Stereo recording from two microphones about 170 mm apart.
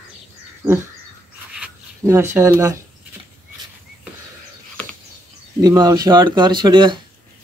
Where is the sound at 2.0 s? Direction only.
15° right (ahead or behind).